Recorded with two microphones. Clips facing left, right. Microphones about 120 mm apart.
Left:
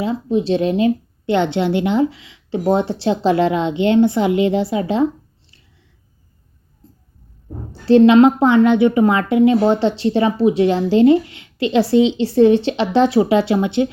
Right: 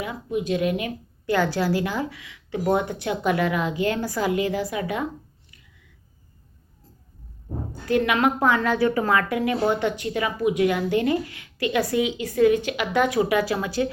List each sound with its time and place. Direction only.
0.0 s a woman's voice: 25° left (ahead or behind)
7.9 s a woman's voice: 25° left (ahead or behind)